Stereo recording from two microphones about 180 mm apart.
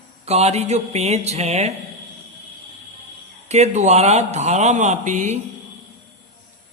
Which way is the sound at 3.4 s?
35° right (ahead or behind).